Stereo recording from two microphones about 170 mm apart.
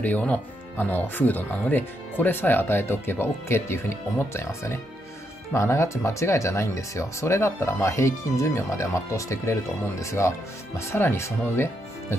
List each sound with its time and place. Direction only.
0.0 s speech: 10° left (ahead or behind)